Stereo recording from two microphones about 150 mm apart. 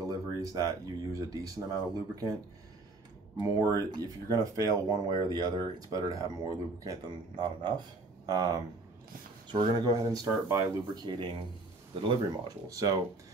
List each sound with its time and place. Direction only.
0.1 s speech: 25° right (ahead or behind)
3.3 s speech: 25° right (ahead or behind)
11.9 s speech: 35° right (ahead or behind)
12.6 s speech: 25° right (ahead or behind)